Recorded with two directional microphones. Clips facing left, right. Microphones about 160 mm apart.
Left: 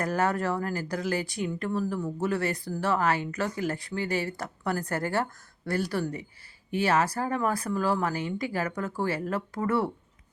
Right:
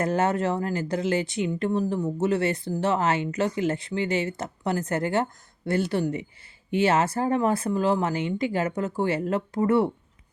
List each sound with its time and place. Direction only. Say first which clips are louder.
0.0 s speech: right 3 dB; 25° right (ahead or behind)